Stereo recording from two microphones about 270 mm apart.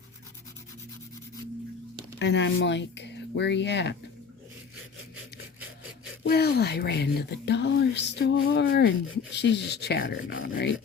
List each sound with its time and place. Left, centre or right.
2.1 s speech: left
6.2 s speech: left